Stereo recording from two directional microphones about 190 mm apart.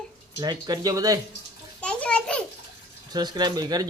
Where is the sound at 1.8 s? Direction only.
5° left (ahead or behind).